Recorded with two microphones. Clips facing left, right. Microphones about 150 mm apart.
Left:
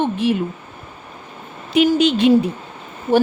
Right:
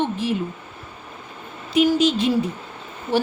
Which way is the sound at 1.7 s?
60° left (ahead or behind).